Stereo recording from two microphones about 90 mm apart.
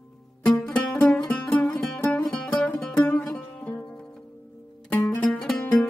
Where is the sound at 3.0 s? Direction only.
20° left (ahead or behind).